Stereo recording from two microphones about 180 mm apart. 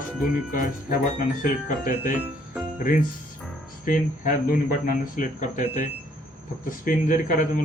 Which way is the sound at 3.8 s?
50° left (ahead or behind).